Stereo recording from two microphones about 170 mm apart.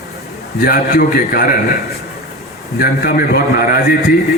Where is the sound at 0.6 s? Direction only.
60° left (ahead or behind).